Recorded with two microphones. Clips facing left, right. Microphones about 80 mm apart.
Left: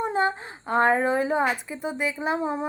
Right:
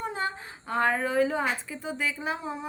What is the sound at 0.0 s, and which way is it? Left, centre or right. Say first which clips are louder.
A woman's voice: left 7 dB; left.